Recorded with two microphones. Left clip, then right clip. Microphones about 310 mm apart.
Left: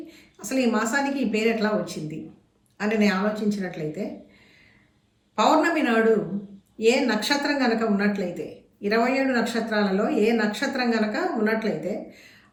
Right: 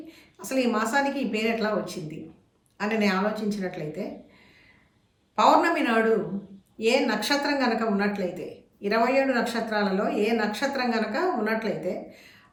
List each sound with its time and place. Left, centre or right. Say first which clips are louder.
0.1 s a woman's voice: even; centre
5.4 s a woman's voice: even; centre